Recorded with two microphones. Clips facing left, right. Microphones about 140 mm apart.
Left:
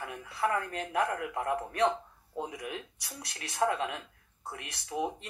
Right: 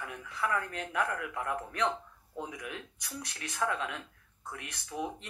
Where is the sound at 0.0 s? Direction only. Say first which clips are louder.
Left 4 dB; 35° left (ahead or behind).